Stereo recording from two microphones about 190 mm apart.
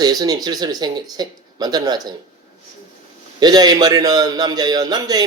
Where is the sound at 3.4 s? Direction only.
20° right (ahead or behind).